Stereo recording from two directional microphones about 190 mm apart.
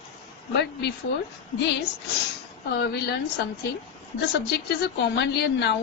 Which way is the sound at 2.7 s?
60° left (ahead or behind).